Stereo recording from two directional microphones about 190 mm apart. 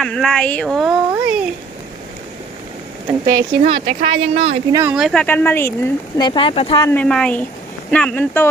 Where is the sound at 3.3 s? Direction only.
25° right (ahead or behind).